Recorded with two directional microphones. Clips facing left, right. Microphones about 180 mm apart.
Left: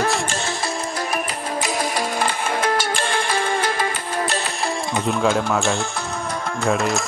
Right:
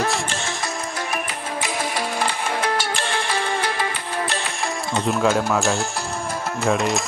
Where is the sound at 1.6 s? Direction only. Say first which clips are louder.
Left 2 dB; 45° left (ahead or behind).